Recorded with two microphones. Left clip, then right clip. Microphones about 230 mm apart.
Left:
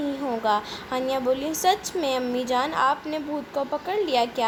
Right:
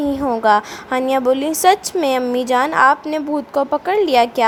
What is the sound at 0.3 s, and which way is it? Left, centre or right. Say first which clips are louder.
A woman's voice: right 10 dB; right.